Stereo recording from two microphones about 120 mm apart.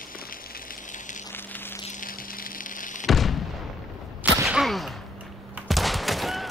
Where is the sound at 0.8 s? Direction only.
90° left.